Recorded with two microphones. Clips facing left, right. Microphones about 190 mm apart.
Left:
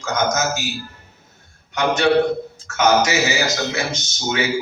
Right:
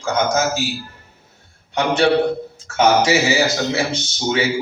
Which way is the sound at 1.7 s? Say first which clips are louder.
Right 1 dB; 30° right (ahead or behind).